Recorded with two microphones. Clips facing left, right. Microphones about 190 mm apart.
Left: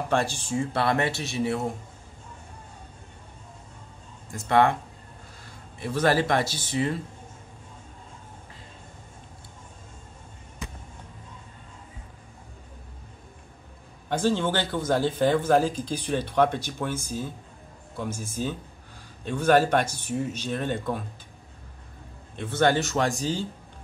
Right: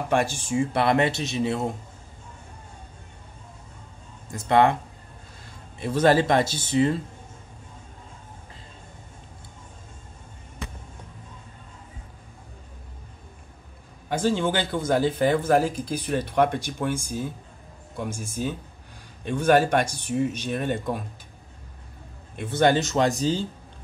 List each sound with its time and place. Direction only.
0.5 s speech: 15° right (ahead or behind)
4.3 s speech: 20° right (ahead or behind)
5.8 s speech: 25° right (ahead or behind)
14.0 s speech: 10° right (ahead or behind)
22.3 s speech: 10° right (ahead or behind)